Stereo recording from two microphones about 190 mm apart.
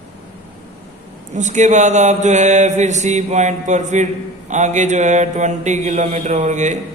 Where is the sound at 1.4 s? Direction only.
40° right (ahead or behind).